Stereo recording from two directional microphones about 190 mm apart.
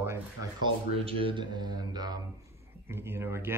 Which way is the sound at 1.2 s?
25° right (ahead or behind).